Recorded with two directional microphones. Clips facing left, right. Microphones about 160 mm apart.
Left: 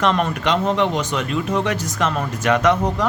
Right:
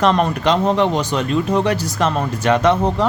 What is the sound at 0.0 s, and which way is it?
Speech, 35° right (ahead or behind).